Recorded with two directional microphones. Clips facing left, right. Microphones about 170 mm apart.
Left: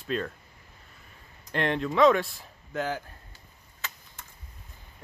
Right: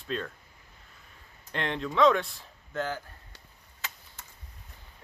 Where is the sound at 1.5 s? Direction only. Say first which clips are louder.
Left 3 dB; 5° left (ahead or behind).